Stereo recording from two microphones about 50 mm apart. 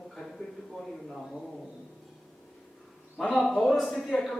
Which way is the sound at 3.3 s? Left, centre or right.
Centre.